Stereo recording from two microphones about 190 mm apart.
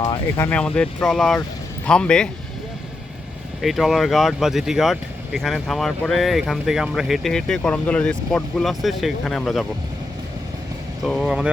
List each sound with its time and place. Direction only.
0.0 s speech: 15° left (ahead or behind)
3.6 s speech: centre (ahead or behind)
11.0 s speech: centre (ahead or behind)